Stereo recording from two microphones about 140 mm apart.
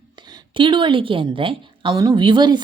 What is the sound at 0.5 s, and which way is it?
A woman's voice, 35° right (ahead or behind).